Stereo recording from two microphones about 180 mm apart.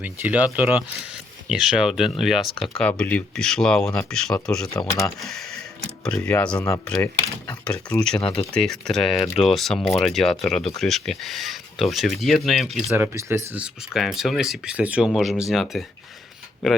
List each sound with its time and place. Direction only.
0.0 s speech: 10° right (ahead or behind)
4.7 s speech: 20° left (ahead or behind)
5.2 s speech: centre (ahead or behind)
6.9 s speech: 20° left (ahead or behind)
7.6 s speech: 5° left (ahead or behind)
12.9 s speech: 15° right (ahead or behind)